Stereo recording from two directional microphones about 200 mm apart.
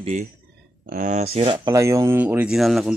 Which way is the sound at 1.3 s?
25° right (ahead or behind).